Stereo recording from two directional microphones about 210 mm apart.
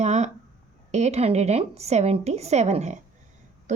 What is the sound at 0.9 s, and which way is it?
Speech, 30° right (ahead or behind).